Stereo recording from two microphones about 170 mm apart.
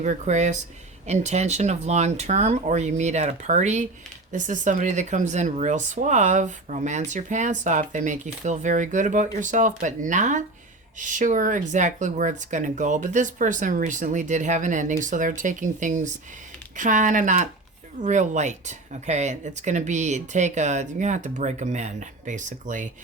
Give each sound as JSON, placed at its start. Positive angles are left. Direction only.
{"t": 0.0, "sound": "speech", "side_deg": -45}